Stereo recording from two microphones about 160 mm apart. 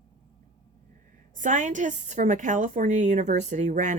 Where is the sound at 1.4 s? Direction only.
50° right (ahead or behind).